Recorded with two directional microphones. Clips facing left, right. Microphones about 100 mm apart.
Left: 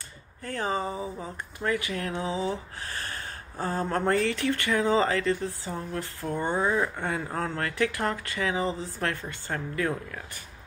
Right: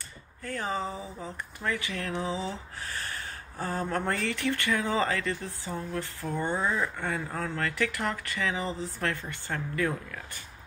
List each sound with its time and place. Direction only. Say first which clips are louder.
0.4 s speech: left 2 dB; 20° left (ahead or behind)
7.3 s speech: left 2 dB; 30° left (ahead or behind)
7.6 s speech: left 2 dB; 20° left (ahead or behind)